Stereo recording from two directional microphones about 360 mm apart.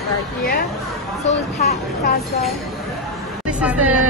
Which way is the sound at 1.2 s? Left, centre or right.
Centre.